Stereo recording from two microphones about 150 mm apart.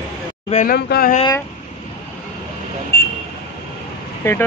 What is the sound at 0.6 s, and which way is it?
Speech, 90° left.